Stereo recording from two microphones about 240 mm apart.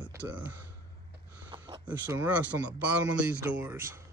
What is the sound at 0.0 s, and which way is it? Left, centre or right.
Speech, centre.